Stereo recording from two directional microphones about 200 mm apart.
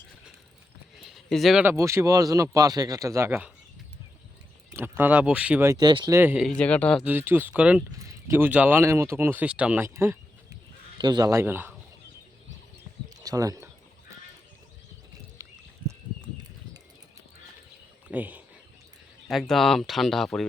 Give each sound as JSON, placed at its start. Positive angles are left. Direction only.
{"t": 1.1, "sound": "speech", "side_deg": 0}
{"t": 4.7, "sound": "speech", "side_deg": -10}
{"t": 6.1, "sound": "speech", "side_deg": -10}
{"t": 6.6, "sound": "speech", "side_deg": 5}
{"t": 7.0, "sound": "speech", "side_deg": -10}
{"t": 13.1, "sound": "speech", "side_deg": -20}
{"t": 18.1, "sound": "speech", "side_deg": -10}